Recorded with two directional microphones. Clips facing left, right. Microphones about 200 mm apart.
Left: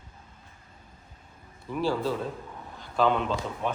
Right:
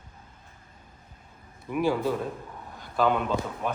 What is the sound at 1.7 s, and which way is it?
Speech, 15° right (ahead or behind).